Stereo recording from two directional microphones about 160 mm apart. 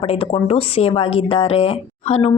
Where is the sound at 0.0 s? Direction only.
35° left (ahead or behind).